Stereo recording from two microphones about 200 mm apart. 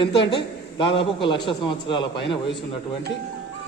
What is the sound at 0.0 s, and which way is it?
A man's voice, 25° left (ahead or behind).